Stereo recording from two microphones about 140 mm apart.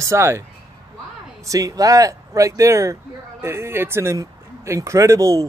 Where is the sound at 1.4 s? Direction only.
25° right (ahead or behind).